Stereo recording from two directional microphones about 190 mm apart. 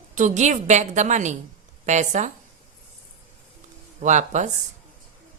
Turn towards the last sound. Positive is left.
turn(degrees=-40)  # may be behind; listen again after turning